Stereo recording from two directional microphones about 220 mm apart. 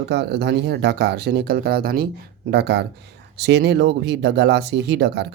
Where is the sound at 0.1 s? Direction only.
50° right (ahead or behind).